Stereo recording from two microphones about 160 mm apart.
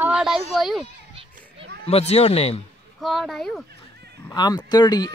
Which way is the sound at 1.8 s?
40° left (ahead or behind).